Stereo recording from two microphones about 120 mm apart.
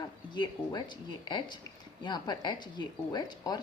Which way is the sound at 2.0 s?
35° left (ahead or behind).